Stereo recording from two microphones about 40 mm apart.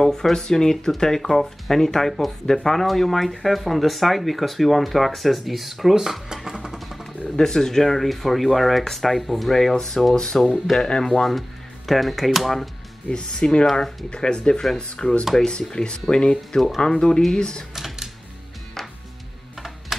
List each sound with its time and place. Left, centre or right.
0.0 s speech: centre
6.8 s a sound: centre
7.2 s speech: centre
10.4 s speech: centre
10.8 s speech: centre
11.2 s speech: centre
13.1 s speech: left
13.7 s speech: centre
14.1 s speech: left
17.7 s music: centre